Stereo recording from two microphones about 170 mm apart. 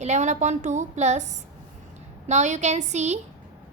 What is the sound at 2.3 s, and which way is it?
Speech, 45° right (ahead or behind).